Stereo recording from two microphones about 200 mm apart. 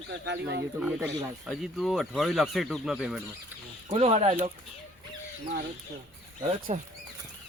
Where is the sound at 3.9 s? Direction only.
30° right (ahead or behind).